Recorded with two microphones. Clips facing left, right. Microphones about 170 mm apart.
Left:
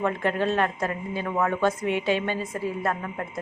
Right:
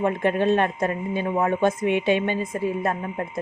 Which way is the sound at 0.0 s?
20° right (ahead or behind).